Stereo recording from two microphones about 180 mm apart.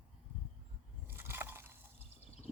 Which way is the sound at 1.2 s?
15° right (ahead or behind).